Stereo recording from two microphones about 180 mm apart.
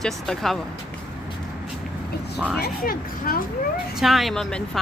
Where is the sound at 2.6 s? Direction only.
55° left (ahead or behind).